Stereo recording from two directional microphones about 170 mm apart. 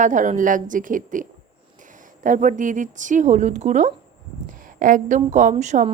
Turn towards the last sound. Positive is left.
turn(degrees=-45)  # may be behind; listen again after turning